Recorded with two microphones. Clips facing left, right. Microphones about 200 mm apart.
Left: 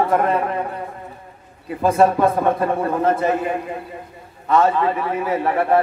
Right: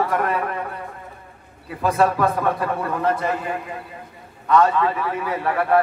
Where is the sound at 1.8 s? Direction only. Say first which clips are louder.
Left 4 dB; 25° left (ahead or behind).